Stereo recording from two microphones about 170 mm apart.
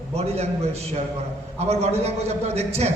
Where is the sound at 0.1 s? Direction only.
40° right (ahead or behind).